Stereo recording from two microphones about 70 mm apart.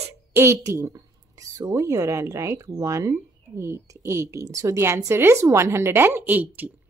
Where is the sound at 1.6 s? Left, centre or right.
Right.